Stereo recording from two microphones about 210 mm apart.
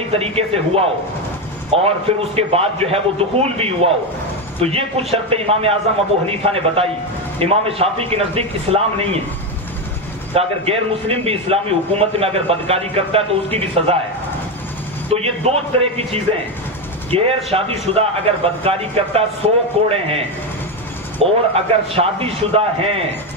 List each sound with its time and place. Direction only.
0.1 s a man's voice: 30° right (ahead or behind)
10.3 s a man's voice: 30° right (ahead or behind)
15.1 s a man's voice: 30° right (ahead or behind)